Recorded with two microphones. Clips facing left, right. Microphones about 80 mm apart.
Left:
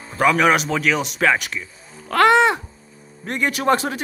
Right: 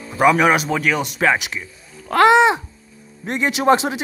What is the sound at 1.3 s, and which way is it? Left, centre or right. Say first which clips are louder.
Speech: right 1 dB; centre.